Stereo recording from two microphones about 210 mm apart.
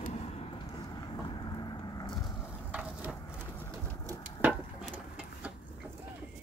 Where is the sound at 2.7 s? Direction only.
5° right (ahead or behind).